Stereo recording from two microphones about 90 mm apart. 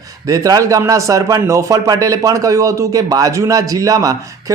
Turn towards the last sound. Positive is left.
turn(degrees=-40)  # may be behind; listen again after turning